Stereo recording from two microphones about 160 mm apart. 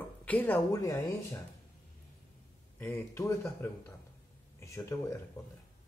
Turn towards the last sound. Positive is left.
turn(degrees=20)  # may be behind; listen again after turning